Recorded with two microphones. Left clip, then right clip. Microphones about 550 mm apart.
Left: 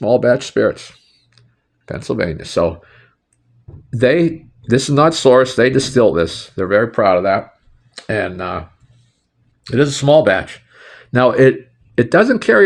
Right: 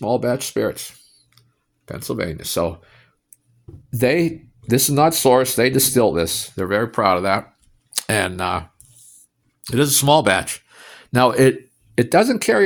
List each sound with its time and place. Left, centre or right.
0.0 s speech: right
1.4 s clicking: right
3.8 s speech: right
9.6 s speech: right